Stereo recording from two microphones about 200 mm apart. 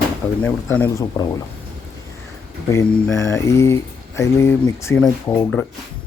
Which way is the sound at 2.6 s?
15° left (ahead or behind).